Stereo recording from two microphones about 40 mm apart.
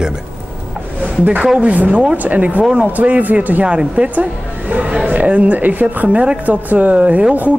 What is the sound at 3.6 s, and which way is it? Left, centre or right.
Speech, right.